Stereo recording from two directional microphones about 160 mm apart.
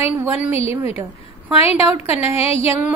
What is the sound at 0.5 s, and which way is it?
A woman's voice, 40° left (ahead or behind).